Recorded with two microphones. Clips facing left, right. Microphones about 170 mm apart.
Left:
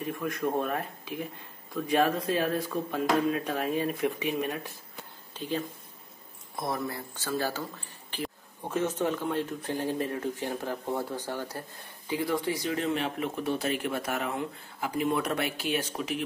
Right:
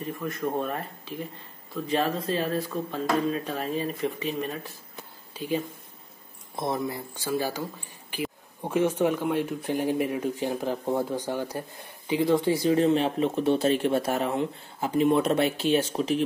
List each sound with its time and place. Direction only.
0.0 s speech: centre (ahead or behind)
5.3 s speech: 10° right (ahead or behind)
6.5 s speech: 20° right (ahead or behind)